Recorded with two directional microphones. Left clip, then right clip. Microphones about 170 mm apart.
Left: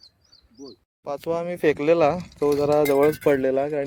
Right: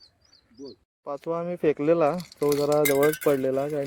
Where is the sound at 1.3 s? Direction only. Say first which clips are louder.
Left 3 dB; 20° left (ahead or behind).